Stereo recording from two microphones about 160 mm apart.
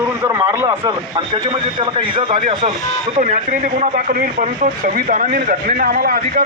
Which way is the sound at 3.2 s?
50° right (ahead or behind).